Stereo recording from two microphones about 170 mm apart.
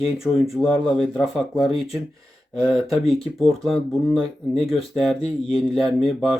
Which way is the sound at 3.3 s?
Centre (ahead or behind).